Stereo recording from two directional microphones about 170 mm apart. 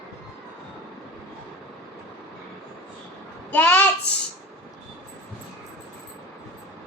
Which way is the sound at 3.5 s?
10° left (ahead or behind).